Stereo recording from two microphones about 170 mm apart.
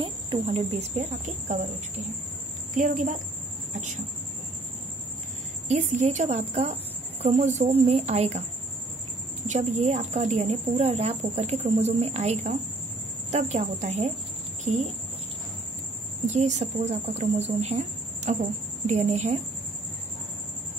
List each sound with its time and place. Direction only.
0.0 s a woman's voice: 30° right (ahead or behind)
2.7 s a woman's voice: 50° right (ahead or behind)
5.7 s a woman's voice: 45° right (ahead or behind)
9.5 s a woman's voice: 45° right (ahead or behind)
16.3 s a woman's voice: 45° right (ahead or behind)